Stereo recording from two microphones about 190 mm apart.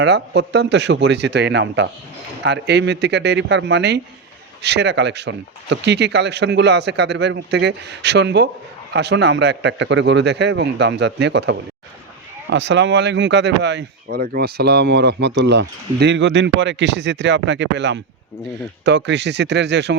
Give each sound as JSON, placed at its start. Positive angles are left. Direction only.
{"t": 0.0, "sound": "speech", "side_deg": -65}
{"t": 14.1, "sound": "speech", "side_deg": -50}